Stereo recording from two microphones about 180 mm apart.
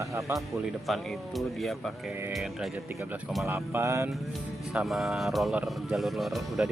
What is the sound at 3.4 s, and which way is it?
Speech, 15° right (ahead or behind).